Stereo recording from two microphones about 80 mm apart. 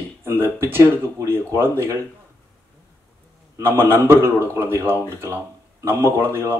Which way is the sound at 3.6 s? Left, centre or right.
Right.